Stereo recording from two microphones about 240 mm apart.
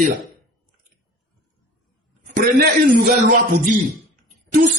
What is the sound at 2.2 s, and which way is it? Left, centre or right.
A man's voice, right.